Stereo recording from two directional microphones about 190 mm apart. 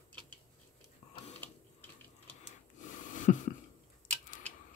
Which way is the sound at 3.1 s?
40° left (ahead or behind).